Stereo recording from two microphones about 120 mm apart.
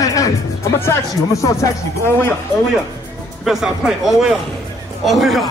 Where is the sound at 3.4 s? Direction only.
5° right (ahead or behind).